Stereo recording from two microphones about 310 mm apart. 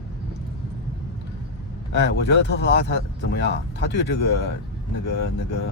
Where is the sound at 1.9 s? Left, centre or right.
Left.